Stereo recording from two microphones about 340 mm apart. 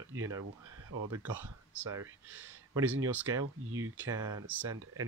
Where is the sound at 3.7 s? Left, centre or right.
Right.